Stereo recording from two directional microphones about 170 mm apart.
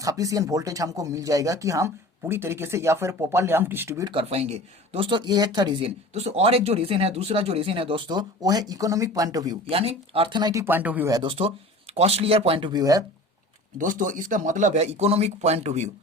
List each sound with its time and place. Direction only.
0.0 s speech: 20° right (ahead or behind)
4.1 s speech: 35° right (ahead or behind)
9.6 s speech: 35° right (ahead or behind); by 11.1 s 10° right (ahead or behind)
11.1 s speech: 30° right (ahead or behind)
13.7 s speech: 50° right (ahead or behind)